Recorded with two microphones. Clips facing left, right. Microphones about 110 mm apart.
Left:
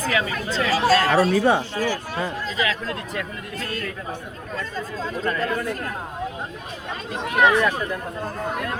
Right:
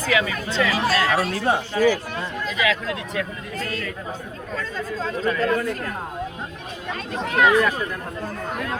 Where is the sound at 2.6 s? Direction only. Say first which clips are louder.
Right 3 dB; 35° left (ahead or behind).